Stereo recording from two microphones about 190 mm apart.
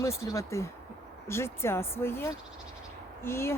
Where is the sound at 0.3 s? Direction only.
15° left (ahead or behind).